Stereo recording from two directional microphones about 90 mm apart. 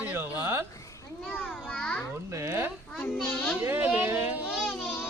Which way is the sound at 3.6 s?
20° right (ahead or behind).